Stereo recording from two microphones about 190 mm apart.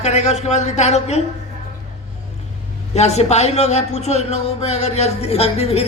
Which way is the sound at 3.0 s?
35° left (ahead or behind).